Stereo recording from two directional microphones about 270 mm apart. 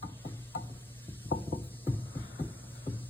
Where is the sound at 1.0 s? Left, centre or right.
Centre.